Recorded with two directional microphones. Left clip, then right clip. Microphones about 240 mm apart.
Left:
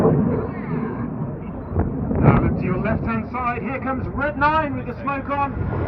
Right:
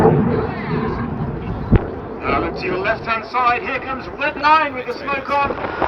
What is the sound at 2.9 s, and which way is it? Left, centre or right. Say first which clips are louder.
Speech: right 6 dB; right.